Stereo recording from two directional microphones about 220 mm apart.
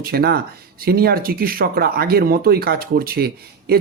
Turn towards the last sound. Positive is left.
turn(degrees=-45)  # may be behind; listen again after turning